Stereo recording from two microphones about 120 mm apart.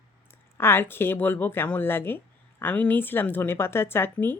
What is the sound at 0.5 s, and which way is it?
Speech, 20° left (ahead or behind).